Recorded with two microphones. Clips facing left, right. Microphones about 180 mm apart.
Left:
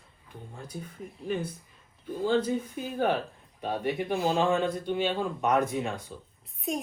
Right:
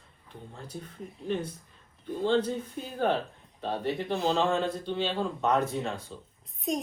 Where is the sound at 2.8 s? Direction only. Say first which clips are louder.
Right 2 dB; 10° left (ahead or behind).